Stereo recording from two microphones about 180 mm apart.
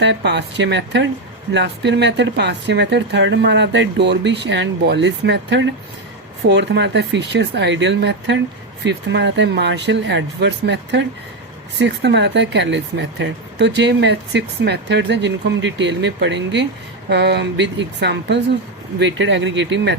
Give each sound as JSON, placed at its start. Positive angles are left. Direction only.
{"t": 0.0, "sound": "speech", "side_deg": -75}
{"t": 18.9, "sound": "speech", "side_deg": -85}